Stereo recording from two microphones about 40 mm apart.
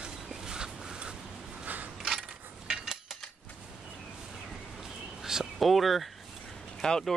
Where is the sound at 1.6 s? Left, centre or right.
Right.